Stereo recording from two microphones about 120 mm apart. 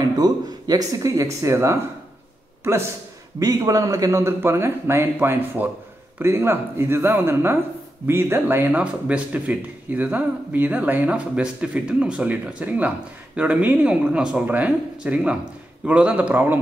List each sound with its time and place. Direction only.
0.2 s a man's voice: 30° right (ahead or behind)
3.3 s a man's voice: 30° right (ahead or behind); by 16.5 s 15° right (ahead or behind)